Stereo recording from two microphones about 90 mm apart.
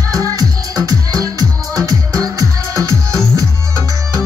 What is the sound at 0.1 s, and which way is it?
Music, 40° right (ahead or behind).